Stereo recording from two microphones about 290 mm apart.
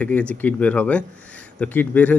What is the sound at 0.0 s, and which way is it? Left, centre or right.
Speech, centre.